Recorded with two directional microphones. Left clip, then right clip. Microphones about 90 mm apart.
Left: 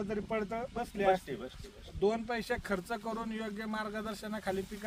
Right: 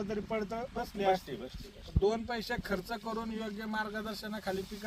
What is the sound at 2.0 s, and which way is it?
Speech, 35° left (ahead or behind).